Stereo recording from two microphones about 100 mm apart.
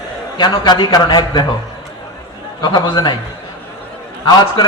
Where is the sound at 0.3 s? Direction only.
50° left (ahead or behind).